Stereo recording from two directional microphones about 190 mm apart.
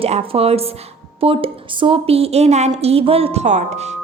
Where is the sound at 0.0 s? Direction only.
30° right (ahead or behind).